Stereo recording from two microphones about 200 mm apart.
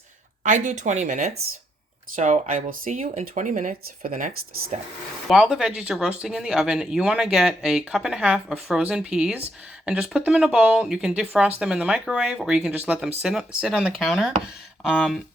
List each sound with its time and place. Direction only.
0.4 s speech: 40° right (ahead or behind)
5.3 s speech: 5° right (ahead or behind)